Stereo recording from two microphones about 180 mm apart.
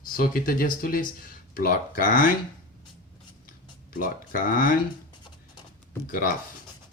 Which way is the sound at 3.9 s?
50° left (ahead or behind).